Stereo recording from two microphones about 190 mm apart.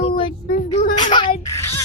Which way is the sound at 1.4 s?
15° left (ahead or behind).